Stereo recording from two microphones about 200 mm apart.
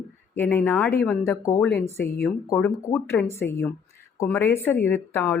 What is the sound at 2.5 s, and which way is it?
A woman's voice, 15° left (ahead or behind).